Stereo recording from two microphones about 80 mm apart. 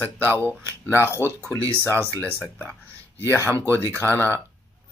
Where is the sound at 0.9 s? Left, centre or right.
Left.